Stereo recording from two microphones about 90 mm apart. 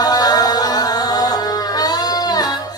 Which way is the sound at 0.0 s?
45° left (ahead or behind).